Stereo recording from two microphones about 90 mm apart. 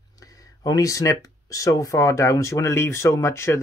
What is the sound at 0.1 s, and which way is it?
Speech, 40° left (ahead or behind).